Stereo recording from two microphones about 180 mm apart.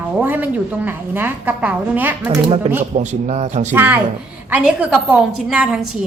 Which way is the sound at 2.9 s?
40° right (ahead or behind).